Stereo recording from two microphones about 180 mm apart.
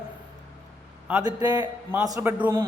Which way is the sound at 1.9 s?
15° right (ahead or behind).